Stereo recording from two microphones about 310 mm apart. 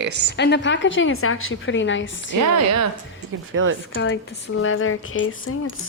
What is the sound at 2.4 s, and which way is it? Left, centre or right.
Speech, right.